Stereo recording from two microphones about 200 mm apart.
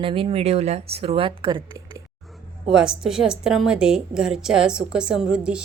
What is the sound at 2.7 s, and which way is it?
A woman's voice, 5° right (ahead or behind).